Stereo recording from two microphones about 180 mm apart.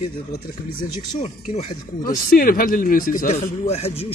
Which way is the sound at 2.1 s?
55° left (ahead or behind).